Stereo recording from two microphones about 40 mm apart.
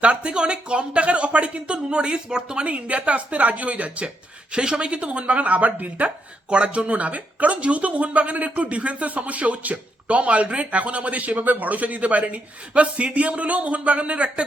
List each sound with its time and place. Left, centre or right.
0.0 s speech: right
2.6 s speech: right
4.5 s speech: right
6.5 s speech: right